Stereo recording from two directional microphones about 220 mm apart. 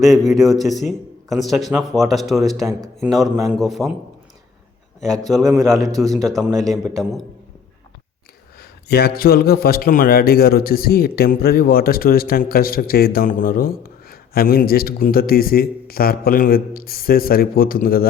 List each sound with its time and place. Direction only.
0.0 s speech: centre (ahead or behind)
2.6 s speech: 15° right (ahead or behind)
3.1 s speech: centre (ahead or behind)
5.0 s speech: centre (ahead or behind)
8.5 s a man's voice: 45° left (ahead or behind)